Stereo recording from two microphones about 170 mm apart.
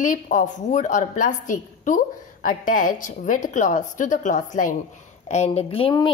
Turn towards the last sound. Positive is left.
turn(degrees=35)  # may be behind; listen again after turning